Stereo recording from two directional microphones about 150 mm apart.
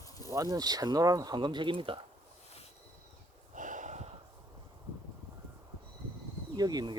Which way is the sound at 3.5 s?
60° right (ahead or behind).